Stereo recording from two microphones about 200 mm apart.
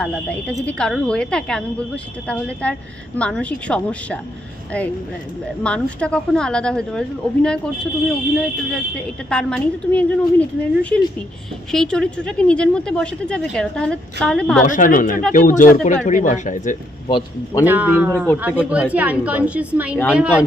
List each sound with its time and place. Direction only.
0.0 s speech: 5° left (ahead or behind)
5.6 s speech: 5° left (ahead or behind)
14.6 s speech: 40° left (ahead or behind)
17.1 s a man's voice: 25° left (ahead or behind)
17.6 s a woman's voice: 10° right (ahead or behind)